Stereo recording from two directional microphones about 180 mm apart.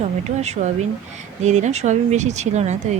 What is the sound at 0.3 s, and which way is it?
Speech, 40° right (ahead or behind).